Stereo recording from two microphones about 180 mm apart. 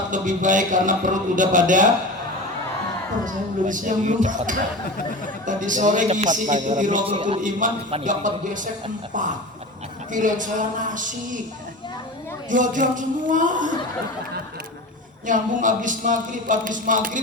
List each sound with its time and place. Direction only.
0.1 s a man's voice: 45° right (ahead or behind)
3.2 s a man's voice: 45° right (ahead or behind)
10.1 s a man's voice: 45° right (ahead or behind)
12.5 s a man's voice: 45° right (ahead or behind)
15.3 s a man's voice: 45° right (ahead or behind)